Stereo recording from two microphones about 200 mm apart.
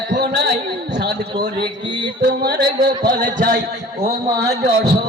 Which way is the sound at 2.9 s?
45° right (ahead or behind).